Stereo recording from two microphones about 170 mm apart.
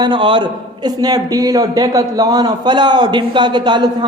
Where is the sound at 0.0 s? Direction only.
25° right (ahead or behind).